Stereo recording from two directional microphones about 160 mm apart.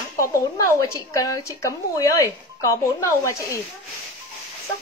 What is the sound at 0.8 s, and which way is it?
Speech, 20° left (ahead or behind).